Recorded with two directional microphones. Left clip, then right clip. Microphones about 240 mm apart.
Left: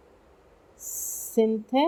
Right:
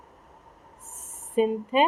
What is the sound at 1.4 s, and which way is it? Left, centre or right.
Speech, centre.